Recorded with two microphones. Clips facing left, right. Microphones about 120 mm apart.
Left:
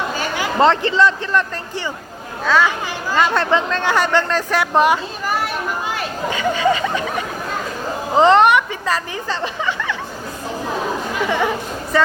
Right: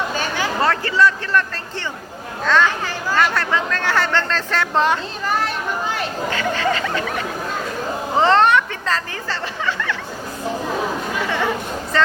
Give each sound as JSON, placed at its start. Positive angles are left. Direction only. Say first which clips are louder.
{"t": 0.3, "sound": "speech", "louder": "left 6 dB", "side_deg": 20}
{"t": 2.4, "sound": "speech", "louder": "left 1 dB", "side_deg": 10}
{"t": 11.9, "sound": "speech", "louder": "left 2 dB", "side_deg": 10}